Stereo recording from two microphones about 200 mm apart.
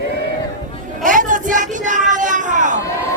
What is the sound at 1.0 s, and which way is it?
Speech, 40° right (ahead or behind).